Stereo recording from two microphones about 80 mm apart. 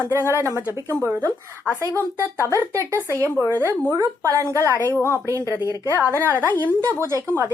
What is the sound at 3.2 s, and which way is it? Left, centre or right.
Speech, left.